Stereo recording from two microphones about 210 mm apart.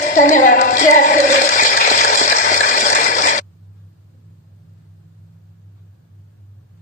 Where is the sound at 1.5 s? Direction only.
40° left (ahead or behind).